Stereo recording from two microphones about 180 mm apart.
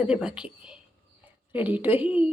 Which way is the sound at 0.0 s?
5° right (ahead or behind).